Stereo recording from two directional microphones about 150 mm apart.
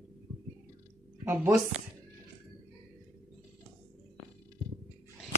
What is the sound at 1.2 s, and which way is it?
Speech, 10° right (ahead or behind).